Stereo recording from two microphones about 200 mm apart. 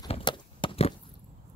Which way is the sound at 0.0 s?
25° left (ahead or behind).